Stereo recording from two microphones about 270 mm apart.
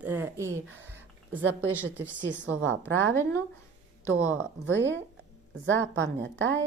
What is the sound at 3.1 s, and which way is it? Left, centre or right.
Speech, centre.